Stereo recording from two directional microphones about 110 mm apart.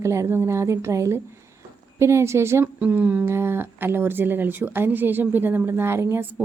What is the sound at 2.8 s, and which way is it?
Speech, 15° right (ahead or behind).